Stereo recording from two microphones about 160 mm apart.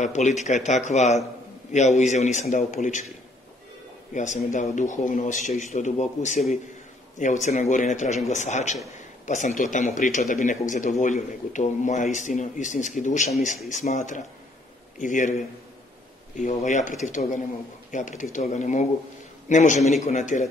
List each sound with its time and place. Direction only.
0.0 s speech: 45° left (ahead or behind)
4.1 s speech: 50° left (ahead or behind)
16.3 s speech: 50° left (ahead or behind)